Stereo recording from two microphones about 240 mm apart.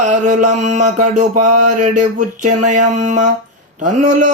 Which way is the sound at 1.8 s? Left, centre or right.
Right.